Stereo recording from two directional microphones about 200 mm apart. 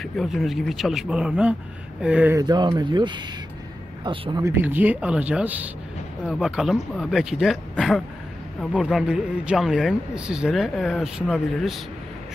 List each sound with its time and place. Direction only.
0.0 s a man's voice: centre (ahead or behind)
2.4 s a man's voice: 20° right (ahead or behind); by 11.8 s centre (ahead or behind)